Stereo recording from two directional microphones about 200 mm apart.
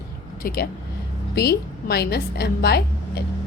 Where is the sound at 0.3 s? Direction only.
50° left (ahead or behind).